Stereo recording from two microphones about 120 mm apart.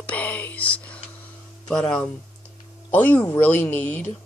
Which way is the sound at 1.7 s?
5° left (ahead or behind).